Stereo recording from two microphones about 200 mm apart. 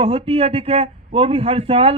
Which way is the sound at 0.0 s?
30° right (ahead or behind).